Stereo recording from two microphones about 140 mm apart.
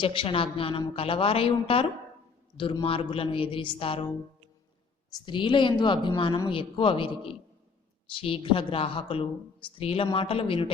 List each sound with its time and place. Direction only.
0.0 s a woman's voice: 40° left (ahead or behind)
5.2 s a woman's voice: 35° left (ahead or behind)